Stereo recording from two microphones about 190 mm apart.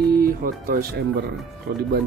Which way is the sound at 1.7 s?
60° right (ahead or behind).